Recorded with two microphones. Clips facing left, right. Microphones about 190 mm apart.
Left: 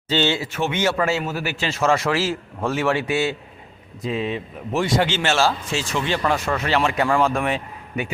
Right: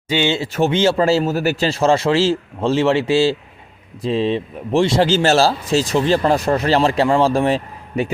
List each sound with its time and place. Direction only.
0.1 s speech: 10° right (ahead or behind)
0.3 s speech: 35° right (ahead or behind)